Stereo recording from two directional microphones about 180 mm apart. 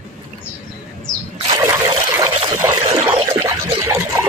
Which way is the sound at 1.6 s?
15° right (ahead or behind).